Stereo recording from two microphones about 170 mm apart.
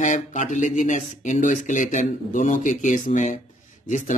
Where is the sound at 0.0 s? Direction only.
50° left (ahead or behind).